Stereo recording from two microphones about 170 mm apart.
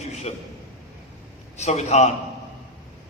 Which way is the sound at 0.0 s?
40° left (ahead or behind).